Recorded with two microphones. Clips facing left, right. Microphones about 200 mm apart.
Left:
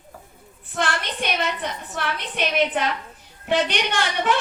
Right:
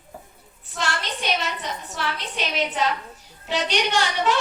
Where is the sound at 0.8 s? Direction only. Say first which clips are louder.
Left 3 dB; 55° left (ahead or behind).